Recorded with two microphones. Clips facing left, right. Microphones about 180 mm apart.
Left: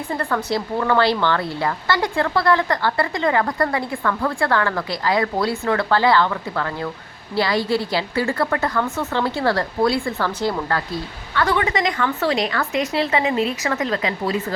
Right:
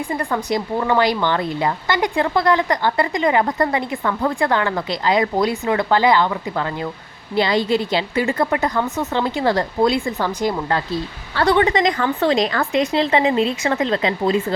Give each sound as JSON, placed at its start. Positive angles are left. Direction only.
{"t": 0.1, "sound": "a woman's voice", "side_deg": -15}
{"t": 11.3, "sound": "a woman's voice", "side_deg": -35}